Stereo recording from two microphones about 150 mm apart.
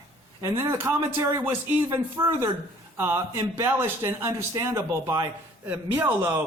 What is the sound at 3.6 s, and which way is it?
Speech, 15° right (ahead or behind).